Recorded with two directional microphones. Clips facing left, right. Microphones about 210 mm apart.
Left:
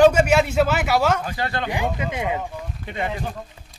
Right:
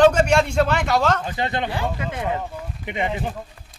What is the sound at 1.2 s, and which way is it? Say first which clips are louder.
Speech: right 1 dB; 20° right (ahead or behind).